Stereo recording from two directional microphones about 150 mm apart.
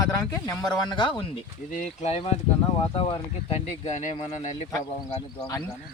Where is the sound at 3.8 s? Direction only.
50° left (ahead or behind).